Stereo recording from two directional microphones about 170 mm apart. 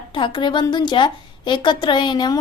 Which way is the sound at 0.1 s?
25° left (ahead or behind).